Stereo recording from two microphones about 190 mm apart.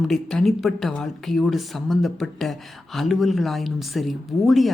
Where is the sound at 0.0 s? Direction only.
Centre (ahead or behind).